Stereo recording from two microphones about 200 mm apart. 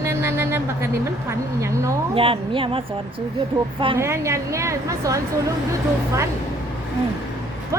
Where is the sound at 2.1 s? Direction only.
25° right (ahead or behind).